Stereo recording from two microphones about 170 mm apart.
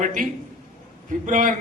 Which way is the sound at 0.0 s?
50° right (ahead or behind).